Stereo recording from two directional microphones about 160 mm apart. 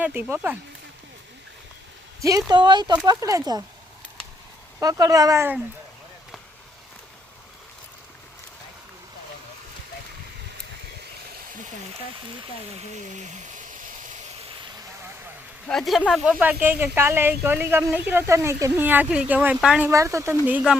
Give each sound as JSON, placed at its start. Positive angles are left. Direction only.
{"t": 0.0, "sound": "speech", "side_deg": -10}
{"t": 2.5, "sound": "speech", "side_deg": -30}
{"t": 4.8, "sound": "speech", "side_deg": -20}
{"t": 12.7, "sound": "speech", "side_deg": -50}
{"t": 15.6, "sound": "speech", "side_deg": 0}
{"t": 19.9, "sound": "speech", "side_deg": -20}